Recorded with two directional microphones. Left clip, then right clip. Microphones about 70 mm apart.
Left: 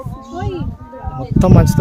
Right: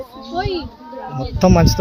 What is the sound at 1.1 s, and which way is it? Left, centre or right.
Speech, left.